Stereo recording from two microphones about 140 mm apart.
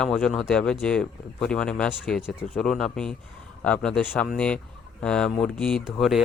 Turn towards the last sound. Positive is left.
turn(degrees=0)  # may be behind; listen again after turning